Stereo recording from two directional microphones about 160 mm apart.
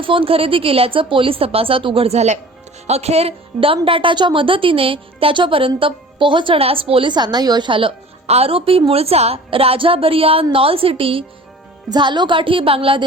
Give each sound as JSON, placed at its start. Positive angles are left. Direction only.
{"t": 0.0, "sound": "a woman's voice", "side_deg": -35}